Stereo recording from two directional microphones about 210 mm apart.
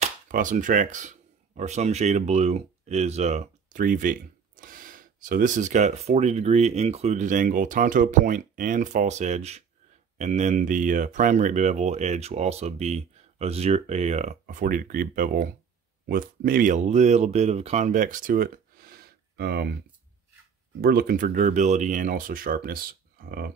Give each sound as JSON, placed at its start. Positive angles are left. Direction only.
{"t": 0.0, "sound": "speech", "side_deg": -40}
{"t": 20.8, "sound": "speech", "side_deg": -45}